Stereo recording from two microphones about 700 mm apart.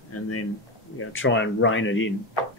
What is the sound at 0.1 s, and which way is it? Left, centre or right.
Speech, centre.